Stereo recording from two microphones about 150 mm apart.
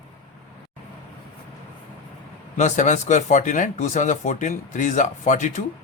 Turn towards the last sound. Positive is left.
turn(degrees=55)  # may be behind; listen again after turning